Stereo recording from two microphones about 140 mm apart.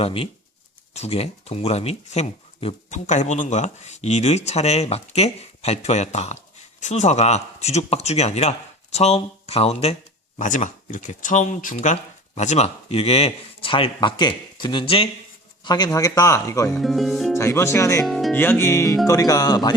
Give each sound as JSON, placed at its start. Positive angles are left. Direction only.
{"t": 0.0, "sound": "speech", "side_deg": 45}
{"t": 10.3, "sound": "speech", "side_deg": 65}
{"t": 15.6, "sound": "a man's voice", "side_deg": 30}
{"t": 16.7, "sound": "speech", "side_deg": 0}
{"t": 17.3, "sound": "a man's voice", "side_deg": 20}
{"t": 18.0, "sound": "speech", "side_deg": 0}
{"t": 18.3, "sound": "a man's voice", "side_deg": 15}